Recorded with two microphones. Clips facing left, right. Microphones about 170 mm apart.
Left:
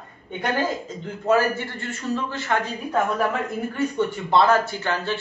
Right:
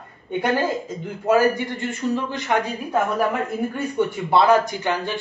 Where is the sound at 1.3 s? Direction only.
15° right (ahead or behind).